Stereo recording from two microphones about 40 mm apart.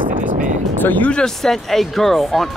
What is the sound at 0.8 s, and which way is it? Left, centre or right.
Speech, left.